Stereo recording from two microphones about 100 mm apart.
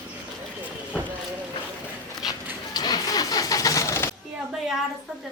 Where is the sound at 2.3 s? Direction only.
40° left (ahead or behind).